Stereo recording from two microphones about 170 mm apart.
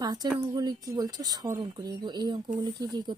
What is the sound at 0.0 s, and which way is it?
A woman's voice, 25° right (ahead or behind).